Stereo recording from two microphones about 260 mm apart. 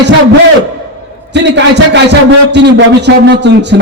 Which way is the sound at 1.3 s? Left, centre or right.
Right.